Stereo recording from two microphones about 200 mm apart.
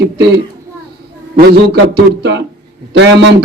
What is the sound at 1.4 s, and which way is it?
A man's voice, 50° right (ahead or behind).